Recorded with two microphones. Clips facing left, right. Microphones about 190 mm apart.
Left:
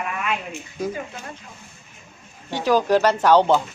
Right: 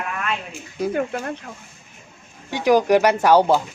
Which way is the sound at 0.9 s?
65° right (ahead or behind).